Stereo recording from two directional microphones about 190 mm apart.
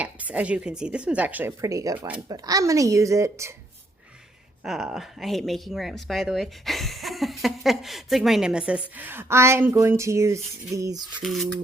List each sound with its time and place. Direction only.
0.0 s a woman's voice: 5° right (ahead or behind)
2.2 s a woman's voice: 20° right (ahead or behind)
4.6 s speech: centre (ahead or behind); by 11.0 s 15° right (ahead or behind)
11.1 s speech: centre (ahead or behind)